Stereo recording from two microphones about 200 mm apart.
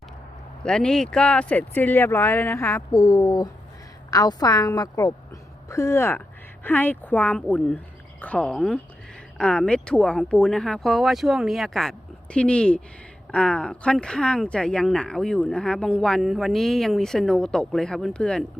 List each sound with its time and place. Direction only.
0.6 s a woman's voice: 5° left (ahead or behind)